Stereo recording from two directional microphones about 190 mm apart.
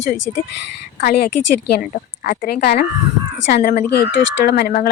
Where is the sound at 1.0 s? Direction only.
55° left (ahead or behind).